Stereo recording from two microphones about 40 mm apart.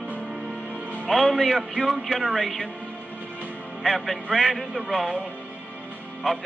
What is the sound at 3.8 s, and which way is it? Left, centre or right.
Speech, centre.